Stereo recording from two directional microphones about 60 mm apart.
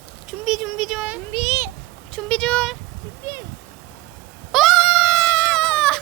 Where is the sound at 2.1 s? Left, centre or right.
Centre.